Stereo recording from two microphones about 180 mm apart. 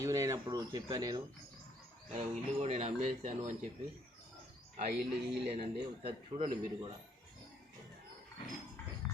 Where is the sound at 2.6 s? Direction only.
35° right (ahead or behind).